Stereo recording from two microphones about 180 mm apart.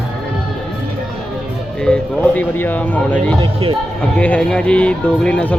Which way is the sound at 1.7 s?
5° left (ahead or behind).